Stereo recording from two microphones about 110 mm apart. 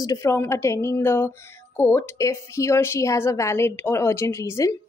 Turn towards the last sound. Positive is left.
turn(degrees=30)  # may be behind; listen again after turning